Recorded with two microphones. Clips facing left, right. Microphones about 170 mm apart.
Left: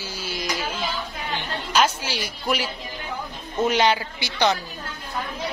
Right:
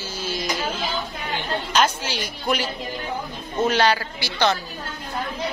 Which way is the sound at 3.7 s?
15° left (ahead or behind).